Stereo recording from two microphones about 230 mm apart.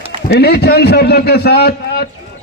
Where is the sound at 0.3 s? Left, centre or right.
Left.